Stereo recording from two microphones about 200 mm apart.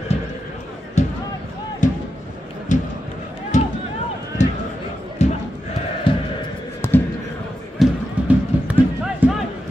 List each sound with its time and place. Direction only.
1.0 s basketball bounce: 35° left (ahead or behind)
1.8 s a sound: 40° left (ahead or behind)
5.2 s crowd: 35° left (ahead or behind)
6.1 s music: 25° left (ahead or behind)
6.8 s a sound: 10° left (ahead or behind)
7.8 s music: 5° right (ahead or behind)